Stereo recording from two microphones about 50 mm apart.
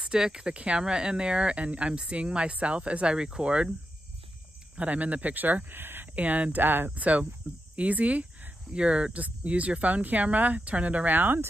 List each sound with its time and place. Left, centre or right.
0.0 s speech: centre
4.7 s speech: right
6.1 s speech: right
7.0 s speech: right
11.1 s speech: right